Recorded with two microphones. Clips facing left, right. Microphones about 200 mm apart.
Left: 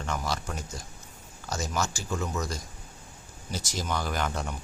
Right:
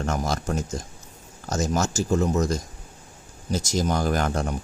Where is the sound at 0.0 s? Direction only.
45° right (ahead or behind).